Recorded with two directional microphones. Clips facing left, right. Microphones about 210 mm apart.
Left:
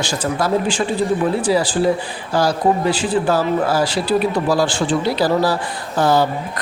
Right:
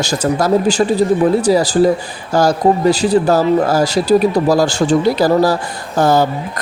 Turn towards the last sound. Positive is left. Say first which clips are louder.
# right 3 dB
turn(degrees=-45)  # may be behind; listen again after turning